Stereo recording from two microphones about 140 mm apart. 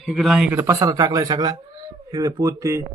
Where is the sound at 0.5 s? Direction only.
20° right (ahead or behind).